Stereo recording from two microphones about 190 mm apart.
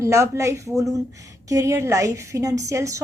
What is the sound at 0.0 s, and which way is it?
A woman's voice, 15° right (ahead or behind).